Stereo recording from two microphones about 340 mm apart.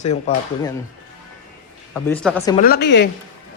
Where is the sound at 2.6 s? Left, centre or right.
Left.